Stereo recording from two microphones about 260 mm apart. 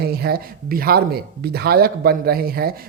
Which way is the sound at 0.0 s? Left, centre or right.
Right.